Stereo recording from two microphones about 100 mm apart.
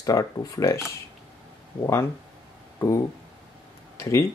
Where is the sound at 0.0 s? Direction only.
35° left (ahead or behind).